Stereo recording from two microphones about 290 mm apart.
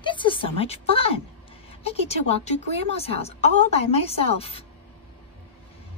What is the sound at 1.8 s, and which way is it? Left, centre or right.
A woman's voice, left.